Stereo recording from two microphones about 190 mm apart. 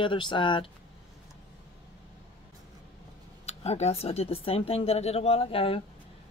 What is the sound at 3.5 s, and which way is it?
A man's voice, 35° left (ahead or behind).